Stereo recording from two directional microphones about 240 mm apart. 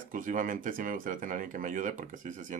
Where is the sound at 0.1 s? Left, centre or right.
Right.